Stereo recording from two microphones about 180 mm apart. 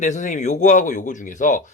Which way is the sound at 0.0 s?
40° left (ahead or behind).